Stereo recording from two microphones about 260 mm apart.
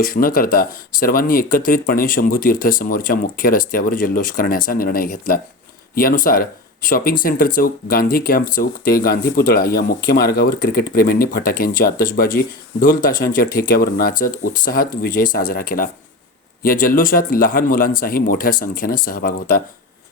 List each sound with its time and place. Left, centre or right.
0.0 s speech: left